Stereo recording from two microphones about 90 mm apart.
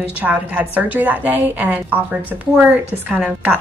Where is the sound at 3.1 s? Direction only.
15° right (ahead or behind).